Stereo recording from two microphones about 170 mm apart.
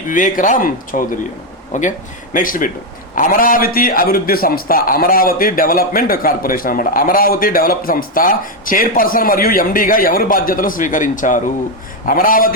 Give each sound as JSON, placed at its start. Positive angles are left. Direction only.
{"t": 0.1, "sound": "a man's voice", "side_deg": 50}